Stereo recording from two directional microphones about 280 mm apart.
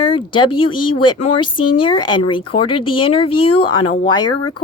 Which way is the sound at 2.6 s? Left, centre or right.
Left.